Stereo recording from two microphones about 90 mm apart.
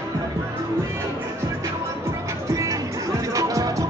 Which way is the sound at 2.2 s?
40° right (ahead or behind).